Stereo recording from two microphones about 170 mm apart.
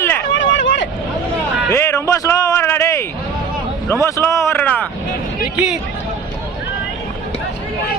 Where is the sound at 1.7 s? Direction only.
15° left (ahead or behind).